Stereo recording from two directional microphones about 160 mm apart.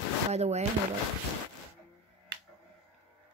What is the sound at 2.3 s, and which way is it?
Finger snapping, 90° right.